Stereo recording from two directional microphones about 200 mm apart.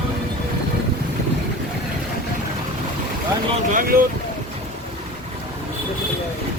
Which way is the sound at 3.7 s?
50° right (ahead or behind).